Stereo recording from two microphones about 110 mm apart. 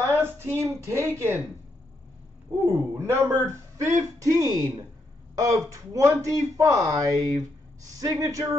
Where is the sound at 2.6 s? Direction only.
20° right (ahead or behind).